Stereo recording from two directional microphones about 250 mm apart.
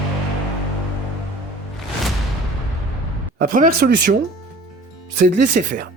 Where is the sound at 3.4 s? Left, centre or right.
Right.